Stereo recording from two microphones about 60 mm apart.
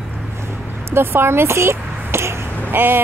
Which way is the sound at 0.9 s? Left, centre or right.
Right.